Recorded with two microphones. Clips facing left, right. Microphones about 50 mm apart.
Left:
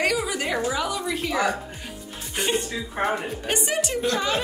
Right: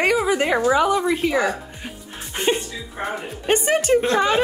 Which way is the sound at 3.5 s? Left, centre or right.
Right.